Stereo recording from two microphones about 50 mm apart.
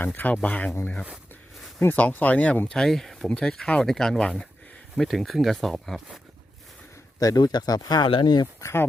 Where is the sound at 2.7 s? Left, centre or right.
Centre.